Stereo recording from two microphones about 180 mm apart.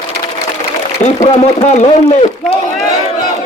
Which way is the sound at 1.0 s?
40° left (ahead or behind).